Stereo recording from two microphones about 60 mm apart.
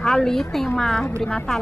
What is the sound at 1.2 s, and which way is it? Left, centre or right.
Speech, centre.